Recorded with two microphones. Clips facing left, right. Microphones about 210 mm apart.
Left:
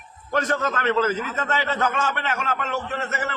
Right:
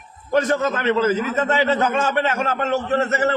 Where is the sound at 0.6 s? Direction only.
20° right (ahead or behind).